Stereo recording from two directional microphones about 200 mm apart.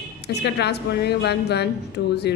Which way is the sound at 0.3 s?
55° left (ahead or behind).